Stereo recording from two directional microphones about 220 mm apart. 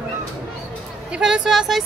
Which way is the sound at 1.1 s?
5° right (ahead or behind).